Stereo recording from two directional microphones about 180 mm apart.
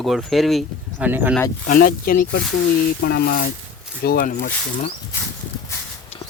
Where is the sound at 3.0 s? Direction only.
70° left (ahead or behind).